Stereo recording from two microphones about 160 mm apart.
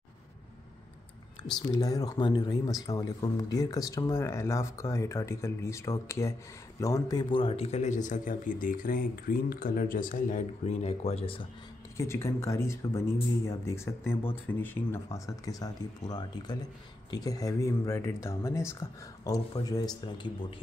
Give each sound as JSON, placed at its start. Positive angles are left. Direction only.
{"t": 1.5, "sound": "a man's voice", "side_deg": 25}
{"t": 12.0, "sound": "speech", "side_deg": 15}